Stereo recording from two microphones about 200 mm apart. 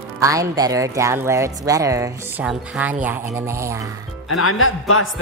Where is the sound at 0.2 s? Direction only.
15° right (ahead or behind).